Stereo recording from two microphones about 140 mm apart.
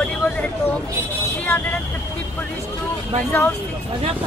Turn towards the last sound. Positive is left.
turn(degrees=15)  # may be behind; listen again after turning